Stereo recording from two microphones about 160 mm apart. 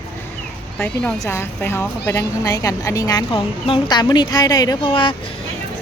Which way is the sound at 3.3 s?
35° left (ahead or behind).